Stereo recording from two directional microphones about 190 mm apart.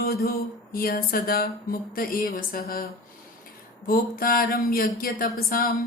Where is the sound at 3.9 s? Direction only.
50° left (ahead or behind).